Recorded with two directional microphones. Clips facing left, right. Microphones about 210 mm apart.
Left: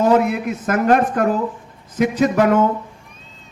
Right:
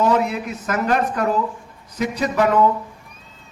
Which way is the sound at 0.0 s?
55° left (ahead or behind).